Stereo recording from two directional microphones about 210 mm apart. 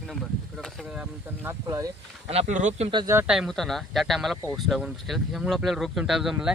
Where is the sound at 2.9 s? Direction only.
15° right (ahead or behind).